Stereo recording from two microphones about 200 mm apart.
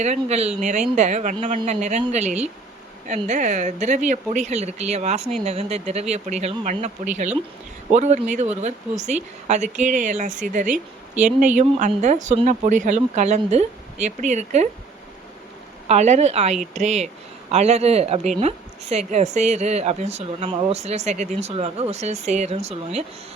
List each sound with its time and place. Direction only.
0.0 s speech: 35° right (ahead or behind)
15.9 s speech: 35° right (ahead or behind)